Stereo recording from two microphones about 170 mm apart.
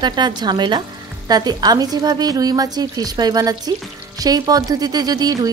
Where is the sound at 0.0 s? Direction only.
25° right (ahead or behind).